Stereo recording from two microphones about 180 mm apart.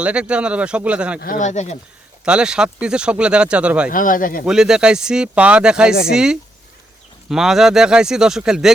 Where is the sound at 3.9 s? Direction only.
50° left (ahead or behind).